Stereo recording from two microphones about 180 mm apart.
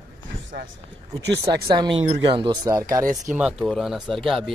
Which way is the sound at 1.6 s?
25° right (ahead or behind).